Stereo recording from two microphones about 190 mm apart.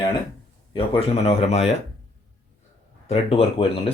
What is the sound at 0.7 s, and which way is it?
Speech, 30° left (ahead or behind).